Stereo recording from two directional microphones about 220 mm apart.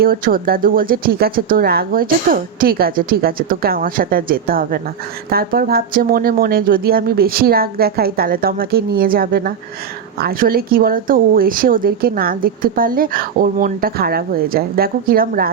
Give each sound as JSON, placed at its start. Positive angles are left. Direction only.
{"t": 0.0, "sound": "speech", "side_deg": -40}